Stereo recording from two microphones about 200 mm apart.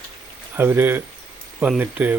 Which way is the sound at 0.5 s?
10° right (ahead or behind).